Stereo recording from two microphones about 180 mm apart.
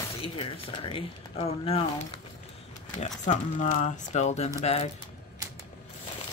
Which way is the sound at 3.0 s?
40° left (ahead or behind).